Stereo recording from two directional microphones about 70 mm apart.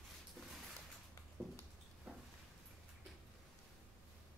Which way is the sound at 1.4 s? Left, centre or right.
Right.